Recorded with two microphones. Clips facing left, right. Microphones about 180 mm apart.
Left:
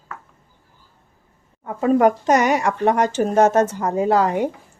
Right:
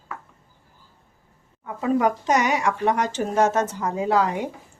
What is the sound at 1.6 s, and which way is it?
Speech, 50° left (ahead or behind).